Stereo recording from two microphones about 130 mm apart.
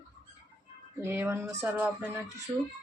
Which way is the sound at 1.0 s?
15° right (ahead or behind).